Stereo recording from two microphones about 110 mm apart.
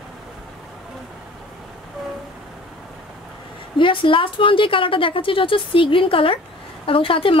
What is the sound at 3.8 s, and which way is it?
Speech, 50° left (ahead or behind).